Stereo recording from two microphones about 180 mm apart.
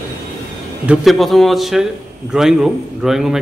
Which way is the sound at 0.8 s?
Centre (ahead or behind).